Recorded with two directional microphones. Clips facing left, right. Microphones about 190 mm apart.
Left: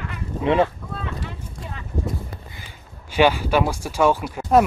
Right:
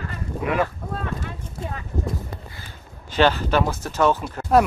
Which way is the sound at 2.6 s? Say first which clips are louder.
Right 1 dB; 10° left (ahead or behind).